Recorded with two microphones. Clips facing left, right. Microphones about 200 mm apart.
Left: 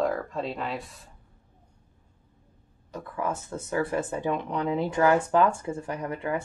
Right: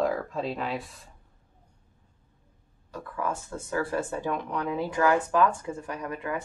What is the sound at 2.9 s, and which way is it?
Speech, 20° left (ahead or behind).